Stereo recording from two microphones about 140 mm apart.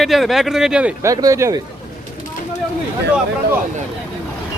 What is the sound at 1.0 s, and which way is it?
Speech, 25° right (ahead or behind).